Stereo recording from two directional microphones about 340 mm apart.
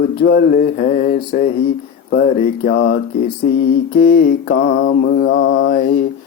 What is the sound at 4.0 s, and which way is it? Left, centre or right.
Mantra, left.